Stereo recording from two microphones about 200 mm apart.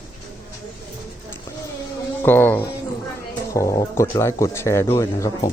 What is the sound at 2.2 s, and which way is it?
Speech, 10° left (ahead or behind).